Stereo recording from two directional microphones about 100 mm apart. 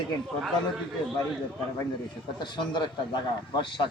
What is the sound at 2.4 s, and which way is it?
Speech, 50° left (ahead or behind).